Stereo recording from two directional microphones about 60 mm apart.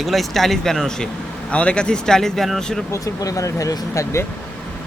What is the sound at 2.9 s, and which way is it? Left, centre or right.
Speech, left.